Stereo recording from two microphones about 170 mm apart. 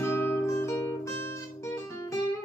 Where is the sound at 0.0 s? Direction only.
15° left (ahead or behind).